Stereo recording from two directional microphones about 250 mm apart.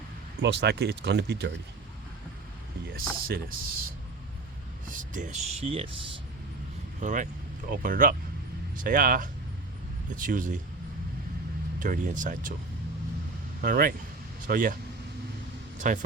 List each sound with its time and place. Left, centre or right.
0.4 s speech: right
2.9 s speech: right
4.9 s speech: right
7.0 s speech: right
11.8 s speech: right
13.6 s speech: right
15.8 s speech: right